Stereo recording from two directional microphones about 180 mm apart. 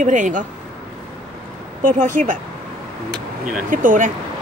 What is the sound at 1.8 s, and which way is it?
Speech, 50° right (ahead or behind).